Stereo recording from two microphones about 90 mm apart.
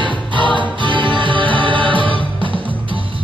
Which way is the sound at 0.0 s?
65° right (ahead or behind).